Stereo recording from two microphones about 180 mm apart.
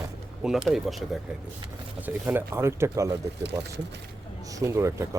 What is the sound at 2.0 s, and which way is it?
Speech, 10° right (ahead or behind).